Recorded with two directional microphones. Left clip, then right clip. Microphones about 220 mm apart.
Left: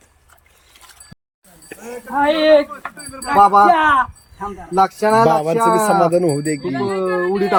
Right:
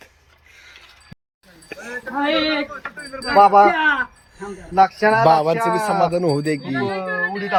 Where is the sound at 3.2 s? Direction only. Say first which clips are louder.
Left 1 dB; 55° left (ahead or behind).